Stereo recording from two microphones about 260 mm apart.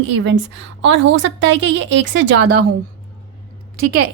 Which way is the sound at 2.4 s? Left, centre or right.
Right.